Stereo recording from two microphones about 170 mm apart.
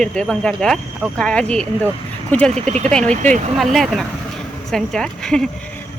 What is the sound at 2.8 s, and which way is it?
Speech, 5° left (ahead or behind).